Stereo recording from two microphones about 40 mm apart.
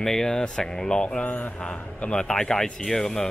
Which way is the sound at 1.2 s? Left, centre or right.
Left.